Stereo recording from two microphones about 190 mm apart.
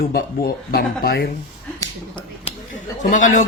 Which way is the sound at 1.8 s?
25° left (ahead or behind).